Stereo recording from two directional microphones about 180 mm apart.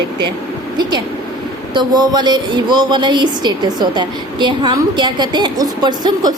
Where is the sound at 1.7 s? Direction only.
25° right (ahead or behind).